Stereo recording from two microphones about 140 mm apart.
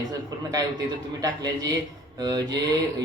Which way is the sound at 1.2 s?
25° right (ahead or behind).